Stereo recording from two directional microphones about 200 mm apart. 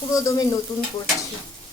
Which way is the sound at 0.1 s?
15° left (ahead or behind).